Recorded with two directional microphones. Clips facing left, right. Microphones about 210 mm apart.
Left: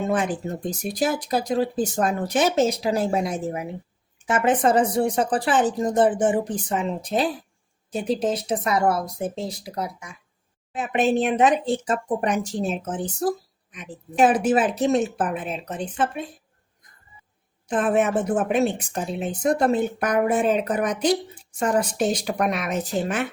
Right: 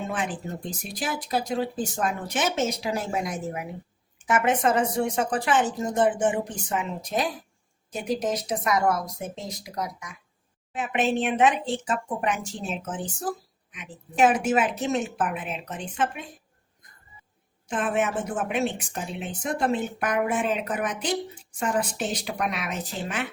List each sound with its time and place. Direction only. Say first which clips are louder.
0.1 s speech: left 6 dB; 40° left (ahead or behind)
17.7 s speech: left 5 dB; 40° left (ahead or behind)